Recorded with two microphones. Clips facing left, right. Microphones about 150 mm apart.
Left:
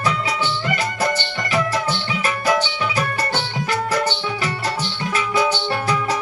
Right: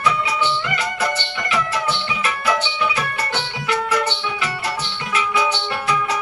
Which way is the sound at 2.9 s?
40° left (ahead or behind).